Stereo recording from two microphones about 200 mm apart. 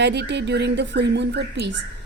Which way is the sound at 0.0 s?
60° right (ahead or behind).